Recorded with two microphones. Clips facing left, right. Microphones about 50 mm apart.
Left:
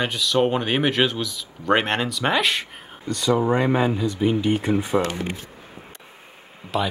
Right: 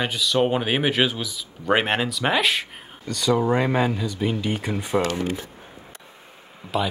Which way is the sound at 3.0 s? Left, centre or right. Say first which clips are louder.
Left 1 dB; centre.